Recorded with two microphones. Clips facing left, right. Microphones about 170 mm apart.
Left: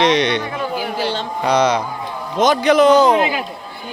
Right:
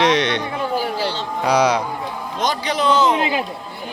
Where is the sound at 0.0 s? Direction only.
5° right (ahead or behind).